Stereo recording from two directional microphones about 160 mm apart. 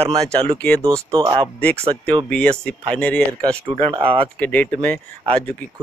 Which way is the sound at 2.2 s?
5° left (ahead or behind).